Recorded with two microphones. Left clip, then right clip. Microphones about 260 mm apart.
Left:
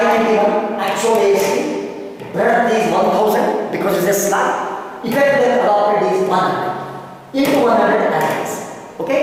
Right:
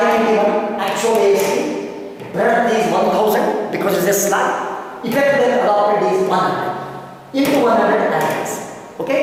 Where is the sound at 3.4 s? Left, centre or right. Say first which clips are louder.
Left 1 dB; centre.